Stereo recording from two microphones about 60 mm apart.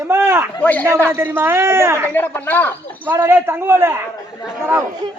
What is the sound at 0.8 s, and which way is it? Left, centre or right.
A man's voice, right.